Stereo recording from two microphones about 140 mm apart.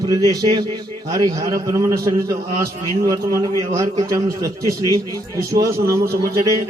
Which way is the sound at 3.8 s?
25° right (ahead or behind).